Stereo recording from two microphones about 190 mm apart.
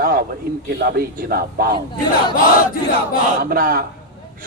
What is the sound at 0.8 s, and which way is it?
Speech, 50° right (ahead or behind).